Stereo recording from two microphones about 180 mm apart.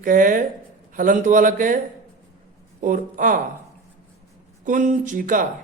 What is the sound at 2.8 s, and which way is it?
Speech, 45° right (ahead or behind).